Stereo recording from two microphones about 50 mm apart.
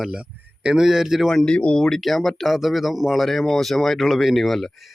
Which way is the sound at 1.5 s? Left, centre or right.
Left.